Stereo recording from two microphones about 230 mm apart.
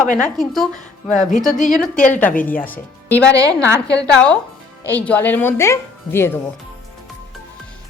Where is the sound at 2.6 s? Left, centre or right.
Centre.